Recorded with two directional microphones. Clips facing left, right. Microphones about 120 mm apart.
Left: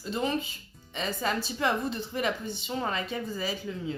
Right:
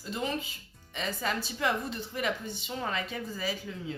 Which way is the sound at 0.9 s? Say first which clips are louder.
Left 3 dB; 30° left (ahead or behind).